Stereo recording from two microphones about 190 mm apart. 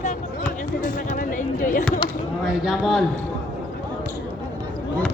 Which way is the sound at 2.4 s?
Centre (ahead or behind).